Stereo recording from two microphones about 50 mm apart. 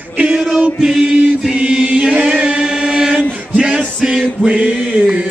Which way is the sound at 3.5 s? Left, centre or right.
Centre.